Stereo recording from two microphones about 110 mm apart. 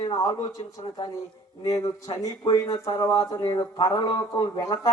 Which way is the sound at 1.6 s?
30° left (ahead or behind).